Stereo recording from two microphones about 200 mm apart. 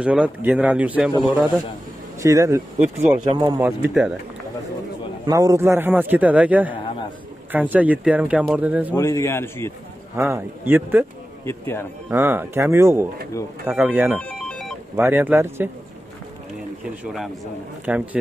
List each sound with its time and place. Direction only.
0.0 s a man's voice: 5° right (ahead or behind)
2.2 s a man's voice: 15° right (ahead or behind)
3.9 s speech: centre (ahead or behind)
5.2 s a man's voice: 20° right (ahead or behind)
8.9 s a man's voice: 15° left (ahead or behind)
10.1 s a man's voice: 10° right (ahead or behind)
11.4 s a man's voice: 10° left (ahead or behind)
12.1 s a man's voice: 10° right (ahead or behind)
14.2 s ringtone: centre (ahead or behind)
15.0 s a man's voice: 10° right (ahead or behind)
17.0 s a man's voice: centre (ahead or behind)